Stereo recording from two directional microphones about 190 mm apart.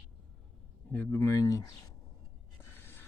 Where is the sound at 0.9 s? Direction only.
10° left (ahead or behind).